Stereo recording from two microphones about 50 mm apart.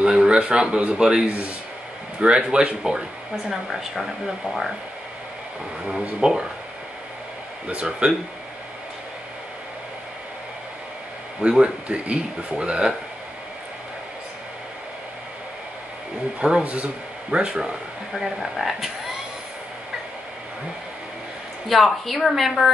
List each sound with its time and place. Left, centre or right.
0.0 s a man's voice: centre
3.4 s speech: centre
5.9 s a man's voice: centre
7.6 s speech: right
11.4 s speech: centre
16.3 s speech: right
18.2 s speech: centre
21.6 s speech: centre